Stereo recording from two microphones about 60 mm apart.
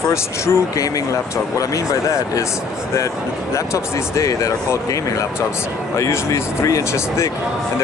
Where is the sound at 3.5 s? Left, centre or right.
Left.